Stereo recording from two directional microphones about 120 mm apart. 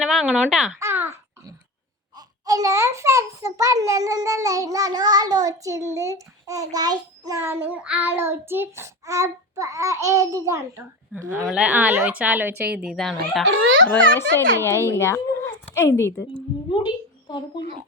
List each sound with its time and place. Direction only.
0.0 s a child's voice: centre (ahead or behind)
0.8 s babbling: 20° right (ahead or behind)
2.1 s a child's voice: 30° right (ahead or behind)
11.1 s a woman's voice: 15° right (ahead or behind); by 13.4 s centre (ahead or behind)
13.9 s a child's voice: 20° left (ahead or behind)
16.2 s a woman's voice: 40° left (ahead or behind)